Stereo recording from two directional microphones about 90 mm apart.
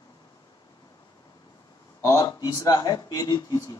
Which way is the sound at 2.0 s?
35° left (ahead or behind).